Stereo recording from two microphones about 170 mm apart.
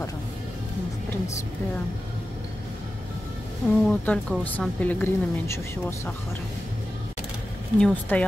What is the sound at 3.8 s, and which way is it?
A woman's voice, 10° left (ahead or behind).